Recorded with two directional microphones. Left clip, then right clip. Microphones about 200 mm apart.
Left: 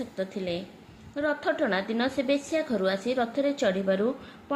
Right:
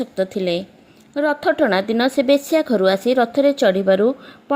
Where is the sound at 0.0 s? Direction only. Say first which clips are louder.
Right 11 dB; 45° right (ahead or behind).